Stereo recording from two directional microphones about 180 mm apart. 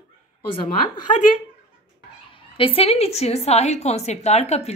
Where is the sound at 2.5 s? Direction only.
30° left (ahead or behind).